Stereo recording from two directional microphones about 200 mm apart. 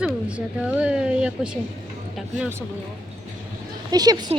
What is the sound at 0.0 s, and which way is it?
Speech, 5° right (ahead or behind).